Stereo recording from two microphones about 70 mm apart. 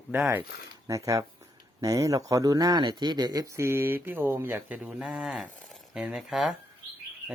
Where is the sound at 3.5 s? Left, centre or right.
Right.